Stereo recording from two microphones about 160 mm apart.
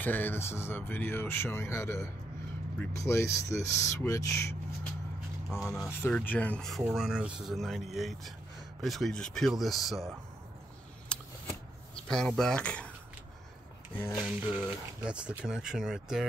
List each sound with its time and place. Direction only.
0.0 s speech: 10° left (ahead or behind)
5.5 s speech: centre (ahead or behind)
6.0 s speech: 10° left (ahead or behind)
6.8 s speech: 5° right (ahead or behind)
12.1 s speech: 5° left (ahead or behind)
14.2 s speech: 5° right (ahead or behind)